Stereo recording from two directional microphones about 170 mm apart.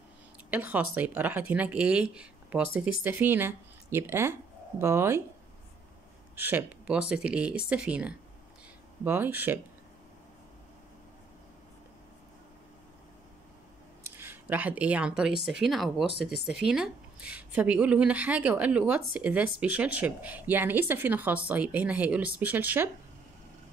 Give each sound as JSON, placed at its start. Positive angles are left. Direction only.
{"t": 0.5, "sound": "a woman's voice", "side_deg": -10}
{"t": 6.3, "sound": "a woman's voice", "side_deg": -10}
{"t": 14.0, "sound": "a woman's voice", "side_deg": -10}